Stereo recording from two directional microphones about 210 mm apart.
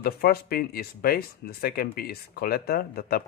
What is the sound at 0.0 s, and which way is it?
Speech, 45° left (ahead or behind).